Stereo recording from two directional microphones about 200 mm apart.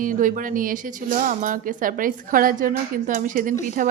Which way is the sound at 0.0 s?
40° right (ahead or behind).